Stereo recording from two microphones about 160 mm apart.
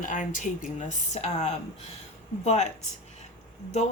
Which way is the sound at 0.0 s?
55° left (ahead or behind).